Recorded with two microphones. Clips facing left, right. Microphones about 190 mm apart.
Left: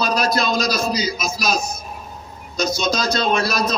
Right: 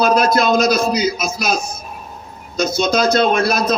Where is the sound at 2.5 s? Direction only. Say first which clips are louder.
Right 4 dB; 55° right (ahead or behind).